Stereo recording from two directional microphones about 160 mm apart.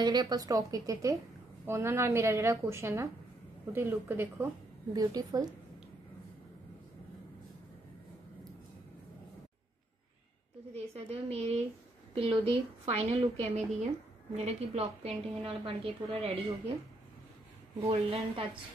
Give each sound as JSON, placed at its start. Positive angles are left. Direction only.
{"t": 0.0, "sound": "a woman's voice", "side_deg": -25}
{"t": 4.9, "sound": "a woman's voice", "side_deg": -25}
{"t": 10.7, "sound": "a woman's voice", "side_deg": -40}
{"t": 17.8, "sound": "a woman's voice", "side_deg": -40}